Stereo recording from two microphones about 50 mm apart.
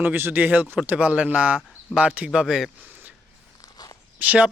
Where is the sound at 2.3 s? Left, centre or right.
Centre.